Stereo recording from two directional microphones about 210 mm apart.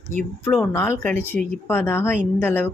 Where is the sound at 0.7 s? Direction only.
10° left (ahead or behind).